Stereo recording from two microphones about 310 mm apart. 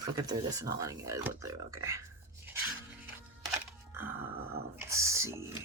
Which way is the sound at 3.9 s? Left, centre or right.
Centre.